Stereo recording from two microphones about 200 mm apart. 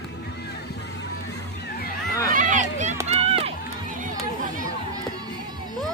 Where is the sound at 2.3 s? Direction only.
40° right (ahead or behind).